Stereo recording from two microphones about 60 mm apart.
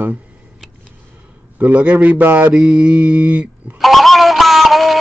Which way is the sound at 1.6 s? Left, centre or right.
Right.